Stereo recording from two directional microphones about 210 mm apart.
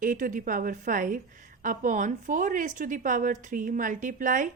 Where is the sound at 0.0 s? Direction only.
40° right (ahead or behind).